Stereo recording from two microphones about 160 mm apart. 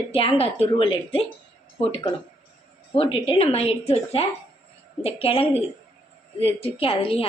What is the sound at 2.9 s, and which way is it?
A woman's voice, 35° left (ahead or behind).